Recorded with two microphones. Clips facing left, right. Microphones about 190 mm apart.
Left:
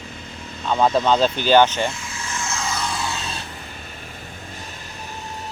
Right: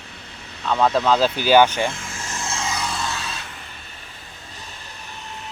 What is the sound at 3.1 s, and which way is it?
Vehicle, 25° left (ahead or behind).